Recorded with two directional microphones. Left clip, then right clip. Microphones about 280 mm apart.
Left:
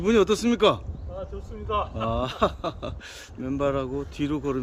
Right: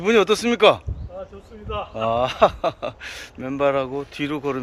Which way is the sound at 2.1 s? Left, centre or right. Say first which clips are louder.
Right 10 dB; centre.